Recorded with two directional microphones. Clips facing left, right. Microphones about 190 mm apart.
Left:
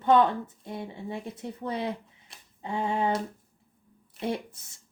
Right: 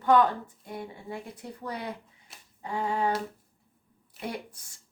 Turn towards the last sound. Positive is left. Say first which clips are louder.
# left 5 dB
turn(degrees=25)  # may be behind; listen again after turning